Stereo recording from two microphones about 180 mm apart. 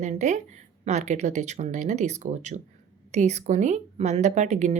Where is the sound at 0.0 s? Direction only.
40° right (ahead or behind).